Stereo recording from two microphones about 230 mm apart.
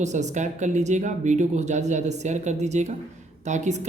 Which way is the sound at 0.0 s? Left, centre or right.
Right.